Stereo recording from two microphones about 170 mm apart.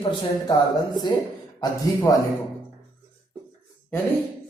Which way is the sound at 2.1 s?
20° left (ahead or behind).